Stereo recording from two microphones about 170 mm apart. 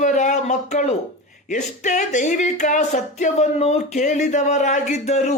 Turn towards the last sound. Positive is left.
turn(degrees=40)  # may be behind; listen again after turning